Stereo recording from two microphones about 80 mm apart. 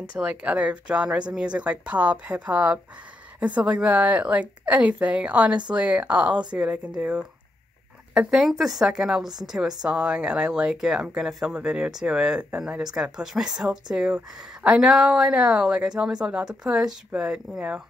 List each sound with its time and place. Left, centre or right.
0.1 s a woman's voice: centre